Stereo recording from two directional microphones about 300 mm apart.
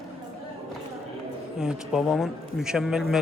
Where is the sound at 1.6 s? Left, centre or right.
Centre.